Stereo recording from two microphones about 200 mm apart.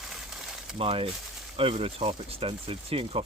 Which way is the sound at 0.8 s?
25° right (ahead or behind).